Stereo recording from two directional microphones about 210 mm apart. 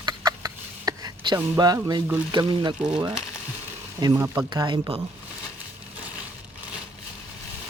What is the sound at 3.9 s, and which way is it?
Speech, 15° right (ahead or behind).